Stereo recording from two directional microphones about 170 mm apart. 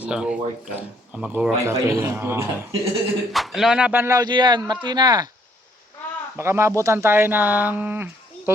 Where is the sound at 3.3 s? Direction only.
Centre (ahead or behind); by 5.3 s 25° right (ahead or behind).